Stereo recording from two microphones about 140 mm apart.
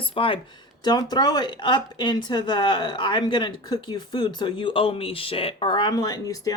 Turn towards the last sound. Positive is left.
turn(degrees=25)  # may be behind; listen again after turning